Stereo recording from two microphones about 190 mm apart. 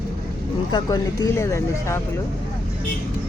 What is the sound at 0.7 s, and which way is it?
Speech, 20° left (ahead or behind).